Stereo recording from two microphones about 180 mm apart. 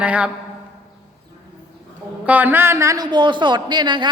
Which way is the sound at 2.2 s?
10° right (ahead or behind).